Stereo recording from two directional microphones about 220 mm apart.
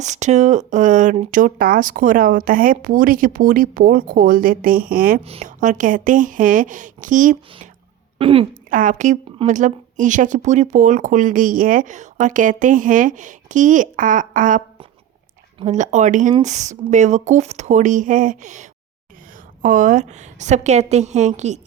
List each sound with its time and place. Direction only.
0.0 s a woman's voice: 30° right (ahead or behind)
5.2 s a woman's voice: 30° right (ahead or behind)
8.2 s speech: 25° right (ahead or behind)
8.7 s a woman's voice: 35° right (ahead or behind)